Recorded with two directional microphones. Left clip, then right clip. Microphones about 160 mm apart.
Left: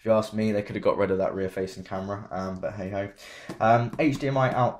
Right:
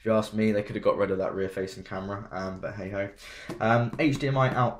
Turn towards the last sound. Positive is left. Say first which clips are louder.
# left 2 dB
turn(degrees=40)  # may be behind; listen again after turning